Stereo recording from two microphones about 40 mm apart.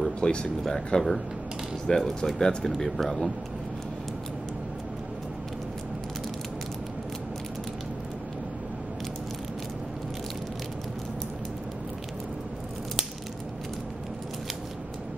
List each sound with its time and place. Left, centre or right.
0.2 s speech: left
0.9 s speech: centre